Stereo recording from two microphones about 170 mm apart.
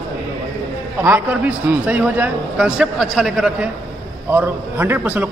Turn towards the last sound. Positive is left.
turn(degrees=-10)  # may be behind; listen again after turning